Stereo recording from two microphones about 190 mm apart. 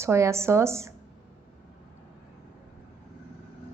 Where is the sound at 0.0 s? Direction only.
15° right (ahead or behind).